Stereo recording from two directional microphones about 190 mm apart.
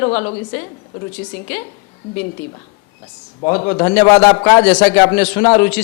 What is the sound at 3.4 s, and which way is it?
A man's voice, 30° left (ahead or behind).